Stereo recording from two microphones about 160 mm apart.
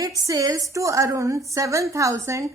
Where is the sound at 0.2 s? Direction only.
20° right (ahead or behind).